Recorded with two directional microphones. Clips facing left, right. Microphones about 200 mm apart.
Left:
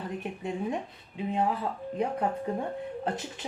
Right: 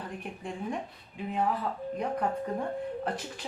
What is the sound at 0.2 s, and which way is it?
Speech, 20° left (ahead or behind).